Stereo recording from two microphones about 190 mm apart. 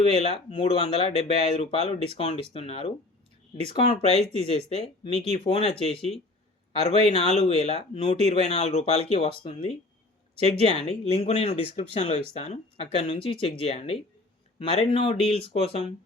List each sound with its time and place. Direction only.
0.0 s speech: 30° left (ahead or behind)
10.8 s speech: 30° left (ahead or behind)